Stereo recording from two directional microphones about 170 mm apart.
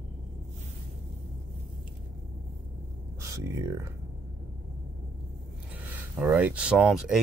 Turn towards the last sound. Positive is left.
turn(degrees=0)  # may be behind; listen again after turning